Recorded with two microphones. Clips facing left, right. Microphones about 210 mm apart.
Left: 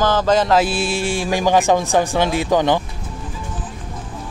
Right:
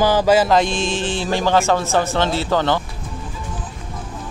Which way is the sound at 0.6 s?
10° left (ahead or behind).